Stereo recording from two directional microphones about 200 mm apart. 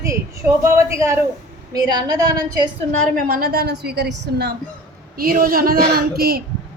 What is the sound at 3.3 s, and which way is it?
A woman's voice, 50° right (ahead or behind).